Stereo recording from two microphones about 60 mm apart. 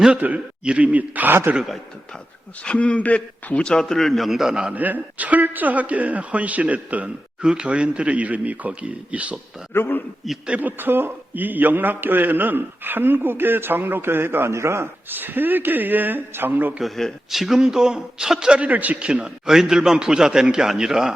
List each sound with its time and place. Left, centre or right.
0.1 s speech: right
2.6 s a man's voice: left; by 4.7 s centre
4.7 s speech: right
9.7 s a man's voice: left
10.4 s a man's voice: right
15.1 s a man's voice: right
16.8 s a man's voice: centre